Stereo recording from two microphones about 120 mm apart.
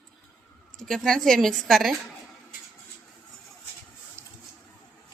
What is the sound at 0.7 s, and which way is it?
A woman's voice, 5° left (ahead or behind).